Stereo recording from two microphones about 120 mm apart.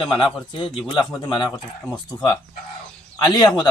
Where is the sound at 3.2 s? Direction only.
35° left (ahead or behind).